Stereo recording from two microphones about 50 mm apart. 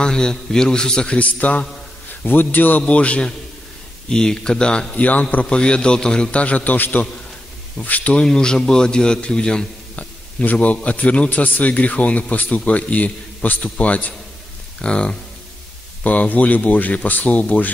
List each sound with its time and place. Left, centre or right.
0.0 s a man's voice: centre
2.2 s speech: left
2.8 s a man's voice: left
4.1 s a man's voice: centre
4.9 s a man's voice: left
8.2 s a man's voice: centre
10.4 s a man's voice: left
16.0 s speech: left